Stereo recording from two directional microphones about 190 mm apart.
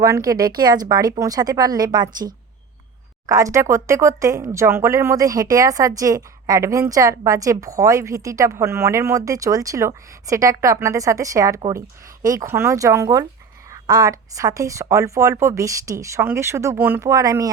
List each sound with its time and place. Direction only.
0.0 s speech: 20° right (ahead or behind)